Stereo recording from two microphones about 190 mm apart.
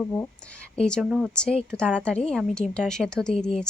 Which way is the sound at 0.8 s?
5° left (ahead or behind).